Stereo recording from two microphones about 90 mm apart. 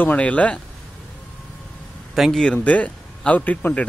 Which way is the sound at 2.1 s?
Centre (ahead or behind).